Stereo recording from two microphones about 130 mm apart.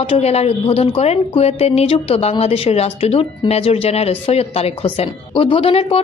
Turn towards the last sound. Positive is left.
turn(degrees=50)  # may be behind; listen again after turning